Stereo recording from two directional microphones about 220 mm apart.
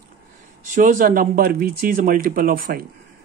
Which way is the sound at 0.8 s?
40° right (ahead or behind).